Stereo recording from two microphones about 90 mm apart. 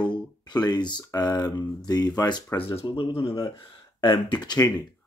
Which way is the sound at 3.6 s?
60° left (ahead or behind).